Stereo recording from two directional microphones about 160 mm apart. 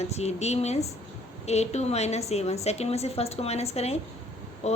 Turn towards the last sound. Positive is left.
turn(degrees=45)  # may be behind; listen again after turning